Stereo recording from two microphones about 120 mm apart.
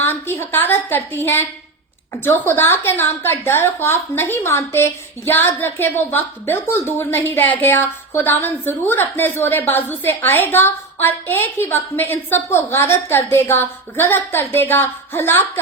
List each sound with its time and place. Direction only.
0.0 s a woman's voice: 20° left (ahead or behind)